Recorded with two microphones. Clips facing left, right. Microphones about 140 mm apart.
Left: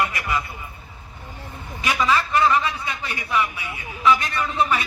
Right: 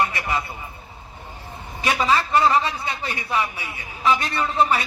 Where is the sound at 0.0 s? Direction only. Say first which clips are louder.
Right 1 dB; 30° right (ahead or behind).